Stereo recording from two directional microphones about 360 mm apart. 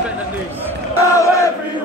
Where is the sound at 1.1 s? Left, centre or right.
Centre.